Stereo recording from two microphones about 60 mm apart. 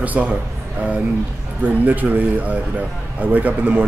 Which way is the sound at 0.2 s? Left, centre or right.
Right.